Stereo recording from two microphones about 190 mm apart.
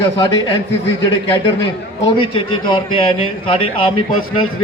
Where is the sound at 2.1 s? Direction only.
25° left (ahead or behind).